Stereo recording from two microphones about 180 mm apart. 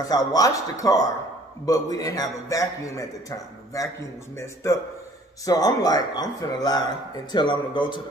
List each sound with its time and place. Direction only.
0.0 s a man's voice: 20° left (ahead or behind)
5.4 s a man's voice: 20° left (ahead or behind)